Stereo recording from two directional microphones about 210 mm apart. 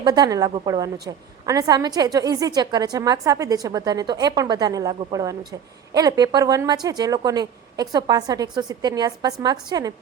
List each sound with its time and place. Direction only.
0.0 s a woman's voice: 20° right (ahead or behind)